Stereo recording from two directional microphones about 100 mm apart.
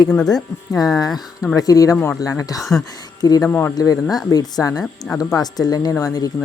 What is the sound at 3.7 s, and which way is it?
Speech, 40° left (ahead or behind).